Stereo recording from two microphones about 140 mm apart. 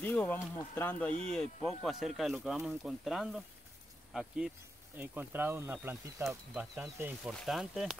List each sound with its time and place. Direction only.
0.0 s speech: 10° left (ahead or behind)
4.9 s speech: 15° right (ahead or behind)
6.5 s speech: 5° right (ahead or behind)